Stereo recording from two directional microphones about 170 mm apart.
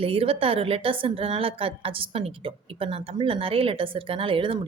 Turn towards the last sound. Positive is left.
turn(degrees=-30)  # may be behind; listen again after turning